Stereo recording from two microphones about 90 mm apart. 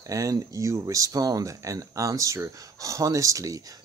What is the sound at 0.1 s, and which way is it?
Speech, 35° right (ahead or behind).